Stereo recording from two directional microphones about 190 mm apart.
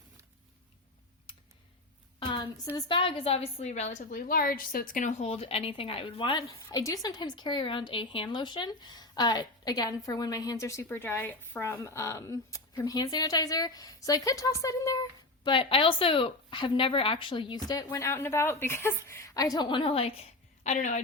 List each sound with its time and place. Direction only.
2.1 s a sound: 25° left (ahead or behind)
2.7 s a woman's voice: 25° left (ahead or behind)
15.4 s speech: 25° left (ahead or behind)
20.7 s a woman's voice: 40° left (ahead or behind)